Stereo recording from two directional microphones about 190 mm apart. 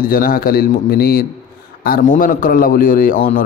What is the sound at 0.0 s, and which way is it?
Mantra, 50° left (ahead or behind).